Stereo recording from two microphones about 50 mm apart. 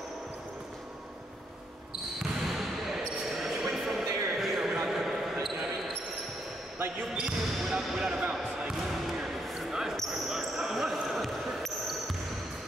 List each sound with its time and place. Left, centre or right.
2.5 s basketball bounce: centre
6.8 s basketball bounce: right
7.2 s basketball bounce: centre